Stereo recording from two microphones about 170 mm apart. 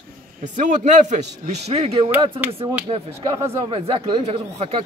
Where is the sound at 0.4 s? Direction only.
45° right (ahead or behind).